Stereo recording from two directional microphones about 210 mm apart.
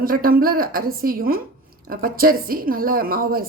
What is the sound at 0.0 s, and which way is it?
A woman's voice, 45° right (ahead or behind).